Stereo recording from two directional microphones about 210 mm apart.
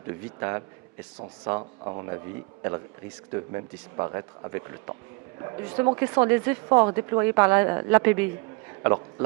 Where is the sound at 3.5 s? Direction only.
20° right (ahead or behind).